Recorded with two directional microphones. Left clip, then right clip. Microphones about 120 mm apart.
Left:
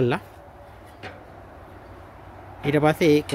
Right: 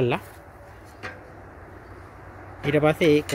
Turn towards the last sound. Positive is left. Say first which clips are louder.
# even
turn(degrees=40)  # may be behind; listen again after turning